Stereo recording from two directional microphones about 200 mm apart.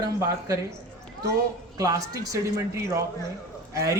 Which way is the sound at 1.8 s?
15° right (ahead or behind).